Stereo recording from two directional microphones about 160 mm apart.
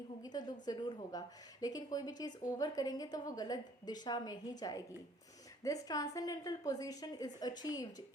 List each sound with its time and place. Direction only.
0.2 s a woman's voice: 25° left (ahead or behind)